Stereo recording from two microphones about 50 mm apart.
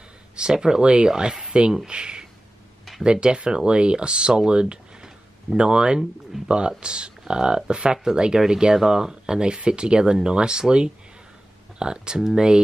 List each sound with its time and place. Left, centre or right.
0.4 s speech: centre
6.3 s speech: centre
6.8 s speech: centre